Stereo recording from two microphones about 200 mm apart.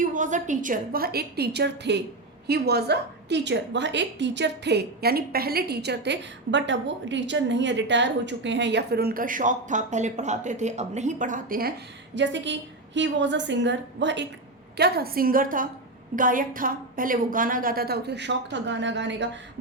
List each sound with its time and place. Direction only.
0.0 s a woman's voice: 40° right (ahead or behind)
12.1 s a woman's voice: 65° right (ahead or behind)